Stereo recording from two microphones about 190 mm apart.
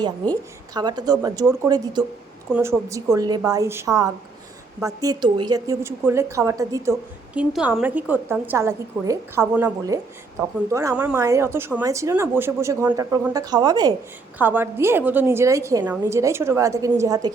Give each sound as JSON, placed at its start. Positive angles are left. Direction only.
{"t": 0.7, "sound": "a woman's voice", "side_deg": -20}
{"t": 7.3, "sound": "a woman's voice", "side_deg": -5}
{"t": 14.3, "sound": "a woman's voice", "side_deg": -10}